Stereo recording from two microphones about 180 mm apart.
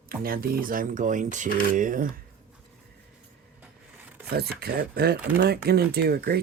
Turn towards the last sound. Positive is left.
turn(degrees=-60)  # may be behind; listen again after turning